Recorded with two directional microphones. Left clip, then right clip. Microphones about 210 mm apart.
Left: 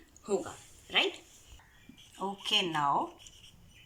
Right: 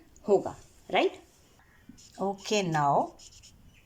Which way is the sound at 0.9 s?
50° right (ahead or behind).